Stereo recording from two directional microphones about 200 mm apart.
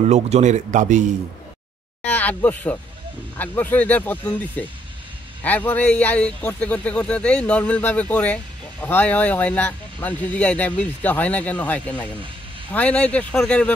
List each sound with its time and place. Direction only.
0.1 s a man's voice: 35° right (ahead or behind)
2.0 s speech: 10° left (ahead or behind)